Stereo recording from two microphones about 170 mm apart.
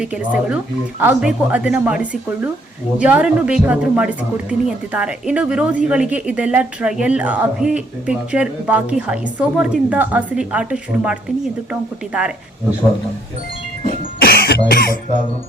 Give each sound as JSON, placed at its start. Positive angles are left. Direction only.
{"t": 0.0, "sound": "a woman's voice", "side_deg": -5}
{"t": 14.2, "sound": "cough", "side_deg": 65}